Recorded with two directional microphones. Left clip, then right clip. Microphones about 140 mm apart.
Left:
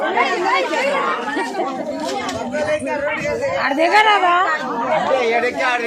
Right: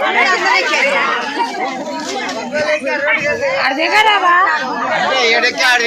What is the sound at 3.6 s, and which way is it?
Speech, 90° left.